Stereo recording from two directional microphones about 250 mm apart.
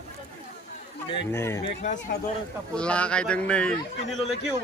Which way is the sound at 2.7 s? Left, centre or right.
Centre.